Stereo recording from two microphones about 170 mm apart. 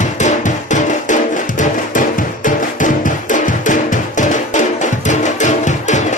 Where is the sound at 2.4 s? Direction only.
50° left (ahead or behind).